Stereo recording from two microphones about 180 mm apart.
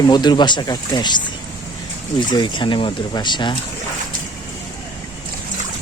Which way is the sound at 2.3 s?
25° left (ahead or behind).